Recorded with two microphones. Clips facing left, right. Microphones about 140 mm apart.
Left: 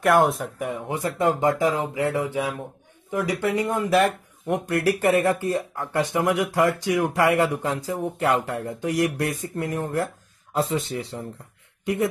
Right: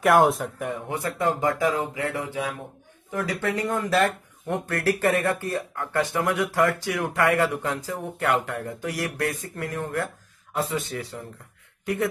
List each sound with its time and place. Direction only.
0.0 s speech: centre (ahead or behind)
0.8 s speech: 25° left (ahead or behind)